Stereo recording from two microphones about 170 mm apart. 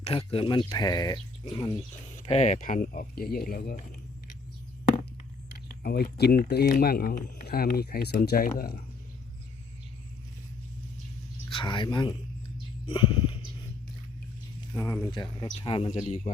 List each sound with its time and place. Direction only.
0.0 s speech: 35° left (ahead or behind)
2.2 s speech: 40° left (ahead or behind)
5.6 s speech: 65° left (ahead or behind)
11.5 s speech: 30° left (ahead or behind)
12.9 s a sound: 30° left (ahead or behind)
14.7 s speech: 15° left (ahead or behind)
15.6 s speech: 30° left (ahead or behind)
16.0 s speech: 45° left (ahead or behind)